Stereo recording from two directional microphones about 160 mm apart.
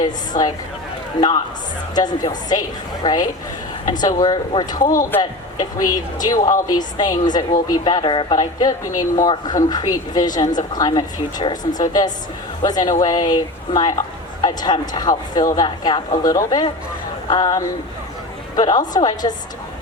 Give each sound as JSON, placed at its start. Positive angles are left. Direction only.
{"t": 0.0, "sound": "a woman's voice", "side_deg": 25}
{"t": 2.0, "sound": "a woman's voice", "side_deg": 25}
{"t": 4.8, "sound": "speech", "side_deg": 55}
{"t": 5.2, "sound": "a woman's voice", "side_deg": 25}